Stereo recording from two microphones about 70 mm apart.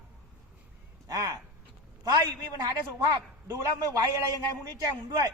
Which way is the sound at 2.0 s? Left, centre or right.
Right.